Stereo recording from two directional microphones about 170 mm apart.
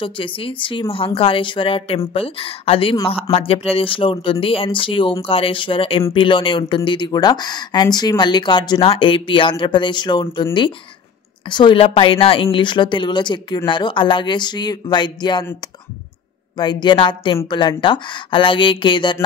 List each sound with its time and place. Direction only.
0.0 s speech: 30° left (ahead or behind)
16.5 s speech: 25° left (ahead or behind)